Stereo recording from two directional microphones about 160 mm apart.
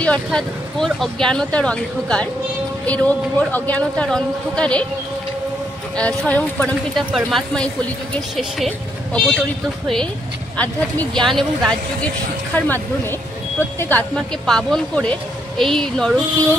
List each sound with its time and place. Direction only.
0.0 s speech: 5° left (ahead or behind)
5.9 s speech: 10° left (ahead or behind)
7.1 s speech: centre (ahead or behind)
11.2 s speech: centre (ahead or behind)